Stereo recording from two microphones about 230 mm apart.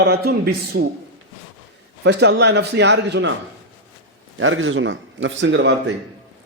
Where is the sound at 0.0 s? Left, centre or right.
Right.